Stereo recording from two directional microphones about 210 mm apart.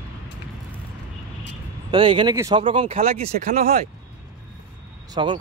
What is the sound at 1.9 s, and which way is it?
Speech, 20° right (ahead or behind).